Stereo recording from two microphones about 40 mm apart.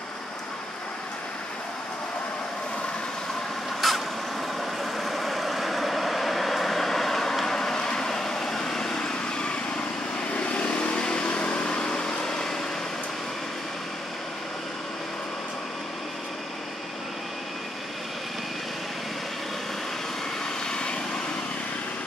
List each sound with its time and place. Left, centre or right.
3.8 s vehicle: centre
10.3 s vehicle: left; by 12.5 s centre
20.7 s vehicle: left